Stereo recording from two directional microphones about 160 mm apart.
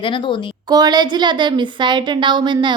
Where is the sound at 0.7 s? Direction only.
25° right (ahead or behind).